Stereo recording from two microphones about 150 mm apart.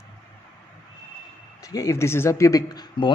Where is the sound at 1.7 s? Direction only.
20° left (ahead or behind).